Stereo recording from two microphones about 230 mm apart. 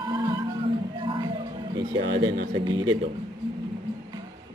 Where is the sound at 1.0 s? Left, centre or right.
Right.